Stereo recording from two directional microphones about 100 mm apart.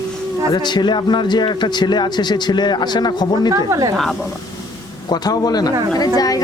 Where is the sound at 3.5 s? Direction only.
35° right (ahead or behind).